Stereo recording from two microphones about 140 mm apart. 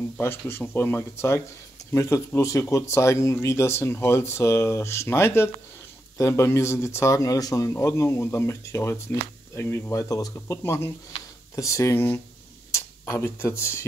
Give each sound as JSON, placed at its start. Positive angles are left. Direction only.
{"t": 0.2, "sound": "speech", "side_deg": 15}